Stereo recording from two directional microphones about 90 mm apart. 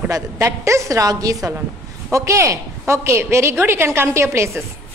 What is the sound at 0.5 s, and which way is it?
A woman's voice, 35° right (ahead or behind).